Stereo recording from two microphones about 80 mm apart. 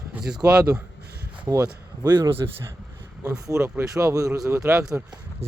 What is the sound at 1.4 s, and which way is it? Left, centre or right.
Speech, right.